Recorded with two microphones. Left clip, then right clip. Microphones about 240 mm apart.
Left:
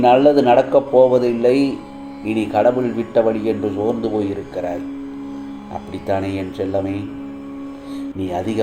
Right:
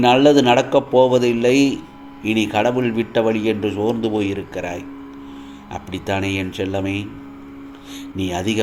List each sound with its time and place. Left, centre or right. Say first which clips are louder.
0.0 s speech: left 1 dB; right
8.2 s speech: even; right